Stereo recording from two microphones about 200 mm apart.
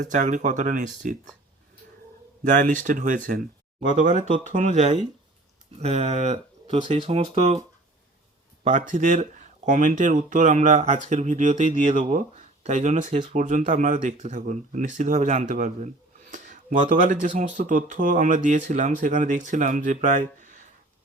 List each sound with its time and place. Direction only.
0.0 s speech: 40° right (ahead or behind)
2.4 s speech: 40° right (ahead or behind)
3.2 s a sound: 45° right (ahead or behind)
3.9 s speech: 40° right (ahead or behind)
8.9 s speech: 40° right (ahead or behind)